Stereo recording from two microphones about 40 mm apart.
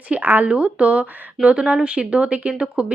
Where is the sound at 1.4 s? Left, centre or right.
Right.